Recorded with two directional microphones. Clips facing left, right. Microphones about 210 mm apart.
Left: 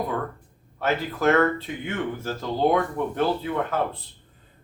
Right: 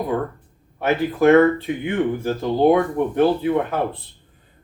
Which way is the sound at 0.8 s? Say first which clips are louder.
Right 6 dB; 15° right (ahead or behind).